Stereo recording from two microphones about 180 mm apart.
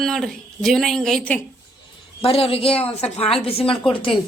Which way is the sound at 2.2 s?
30° left (ahead or behind).